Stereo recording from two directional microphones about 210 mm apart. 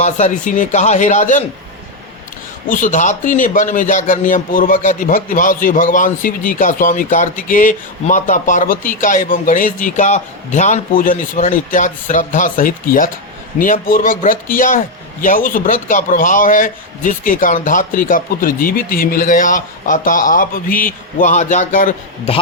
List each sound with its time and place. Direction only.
0.0 s a man's voice: 35° left (ahead or behind)
2.6 s a man's voice: 40° left (ahead or behind)